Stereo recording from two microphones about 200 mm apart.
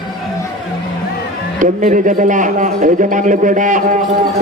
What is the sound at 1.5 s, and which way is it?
A man's voice, 40° right (ahead or behind).